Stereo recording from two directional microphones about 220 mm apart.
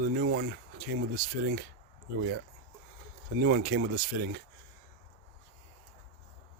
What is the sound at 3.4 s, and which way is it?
Speech, 45° right (ahead or behind).